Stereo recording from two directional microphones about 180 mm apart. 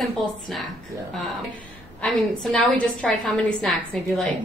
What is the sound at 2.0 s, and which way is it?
A woman's voice, 5° left (ahead or behind).